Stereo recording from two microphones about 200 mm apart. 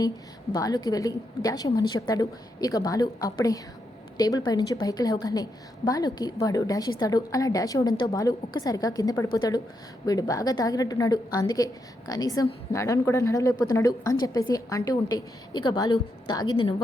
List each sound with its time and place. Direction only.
0.5 s a woman's voice: 20° left (ahead or behind)